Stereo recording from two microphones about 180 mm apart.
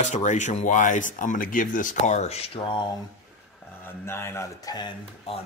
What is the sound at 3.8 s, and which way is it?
Speech, 15° left (ahead or behind).